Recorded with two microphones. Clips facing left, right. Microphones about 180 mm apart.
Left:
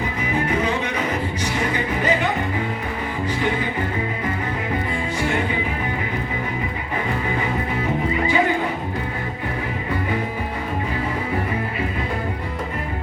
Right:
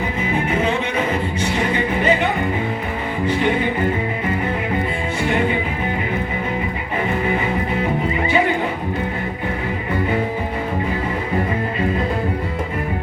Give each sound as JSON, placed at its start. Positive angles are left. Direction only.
{"t": 0.3, "sound": "music", "side_deg": -25}